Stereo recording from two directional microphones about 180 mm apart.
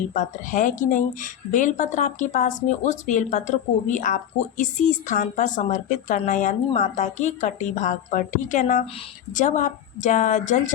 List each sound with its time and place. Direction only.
0.1 s a woman's voice: 45° left (ahead or behind)